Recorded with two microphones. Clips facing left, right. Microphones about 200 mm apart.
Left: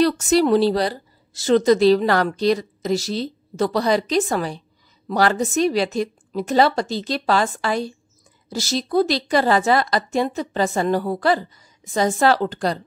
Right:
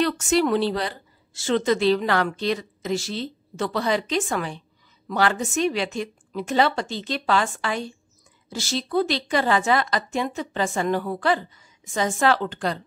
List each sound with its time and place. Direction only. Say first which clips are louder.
0.0 s a woman's voice: left 4 dB; 35° left (ahead or behind)